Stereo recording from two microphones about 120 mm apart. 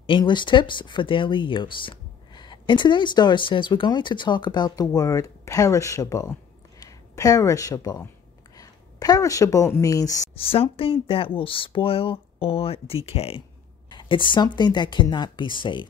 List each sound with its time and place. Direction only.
0.0 s speech: 40° left (ahead or behind)
10.3 s speech: 50° left (ahead or behind)
13.8 s speech: 40° left (ahead or behind)